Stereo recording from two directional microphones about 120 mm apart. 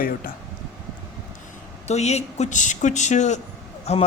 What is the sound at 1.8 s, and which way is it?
Speech, 65° left (ahead or behind).